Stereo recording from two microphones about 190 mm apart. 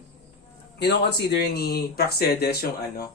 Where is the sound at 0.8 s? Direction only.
60° left (ahead or behind).